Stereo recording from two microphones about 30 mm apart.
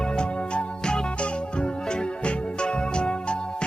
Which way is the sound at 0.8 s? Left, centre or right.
Left.